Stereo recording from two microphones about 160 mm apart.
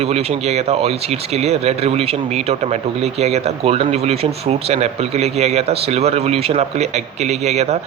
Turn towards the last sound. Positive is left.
turn(degrees=-45)  # may be behind; listen again after turning